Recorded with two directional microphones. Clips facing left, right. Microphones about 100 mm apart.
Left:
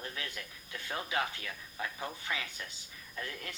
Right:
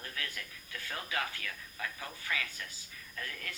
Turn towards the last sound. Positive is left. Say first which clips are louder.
# left 1 dB
turn(degrees=25)  # may be behind; listen again after turning